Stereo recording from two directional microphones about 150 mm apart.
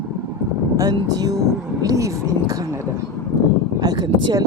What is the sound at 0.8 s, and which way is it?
Speech, 25° right (ahead or behind).